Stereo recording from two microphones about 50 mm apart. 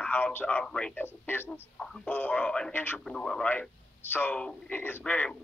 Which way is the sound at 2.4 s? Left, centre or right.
Centre.